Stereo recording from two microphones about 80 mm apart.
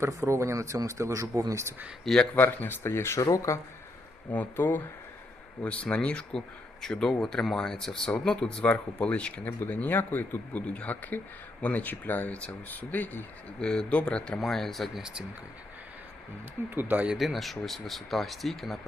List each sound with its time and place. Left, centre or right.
0.0 s speech: right
2.3 s speech: left
4.3 s speech: left
9.5 s speech: left; by 15.0 s centre
16.6 s speech: right
17.1 s speech: centre